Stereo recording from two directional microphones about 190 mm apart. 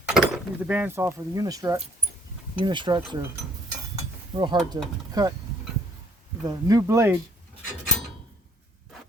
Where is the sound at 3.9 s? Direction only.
25° right (ahead or behind).